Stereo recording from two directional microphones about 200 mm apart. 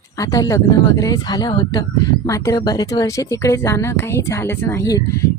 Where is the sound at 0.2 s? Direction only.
15° left (ahead or behind).